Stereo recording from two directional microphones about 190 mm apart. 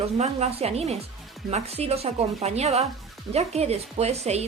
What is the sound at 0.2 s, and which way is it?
A woman's voice, 35° right (ahead or behind).